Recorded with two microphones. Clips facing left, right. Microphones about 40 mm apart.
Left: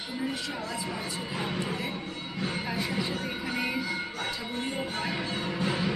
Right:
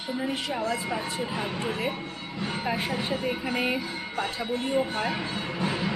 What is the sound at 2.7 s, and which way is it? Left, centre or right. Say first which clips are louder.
A woman's voice: right 2 dB; right.